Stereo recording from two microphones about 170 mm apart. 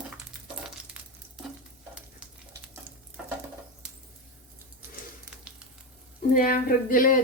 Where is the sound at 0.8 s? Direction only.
5° right (ahead or behind).